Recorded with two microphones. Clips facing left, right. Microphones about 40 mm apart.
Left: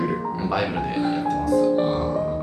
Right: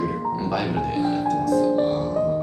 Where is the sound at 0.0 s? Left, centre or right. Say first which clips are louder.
Even; centre.